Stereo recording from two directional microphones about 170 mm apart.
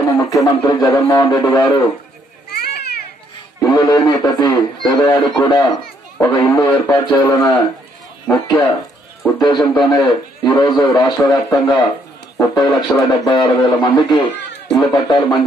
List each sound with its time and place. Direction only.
0.1 s a man's voice: 20° left (ahead or behind)
2.5 s children playing: 65° left (ahead or behind)
3.6 s a man's voice: 20° left (ahead or behind)